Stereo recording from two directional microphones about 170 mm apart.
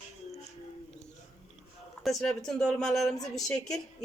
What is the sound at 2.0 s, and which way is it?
A woman's voice, centre (ahead or behind).